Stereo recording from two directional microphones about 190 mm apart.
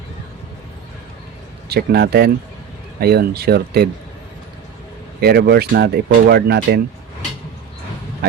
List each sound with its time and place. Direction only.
1.7 s speech: 55° right (ahead or behind)
5.2 s speech: 60° right (ahead or behind)